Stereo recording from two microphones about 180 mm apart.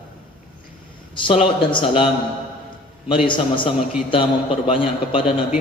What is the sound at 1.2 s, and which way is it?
Speech, 30° left (ahead or behind).